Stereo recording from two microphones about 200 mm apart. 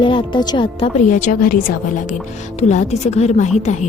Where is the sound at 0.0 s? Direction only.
25° left (ahead or behind).